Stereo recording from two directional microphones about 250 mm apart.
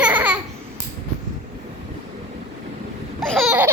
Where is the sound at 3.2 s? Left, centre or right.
Centre.